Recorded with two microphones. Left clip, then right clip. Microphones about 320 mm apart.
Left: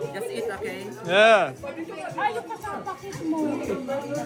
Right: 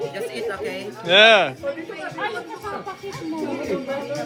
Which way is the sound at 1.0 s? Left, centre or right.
Centre.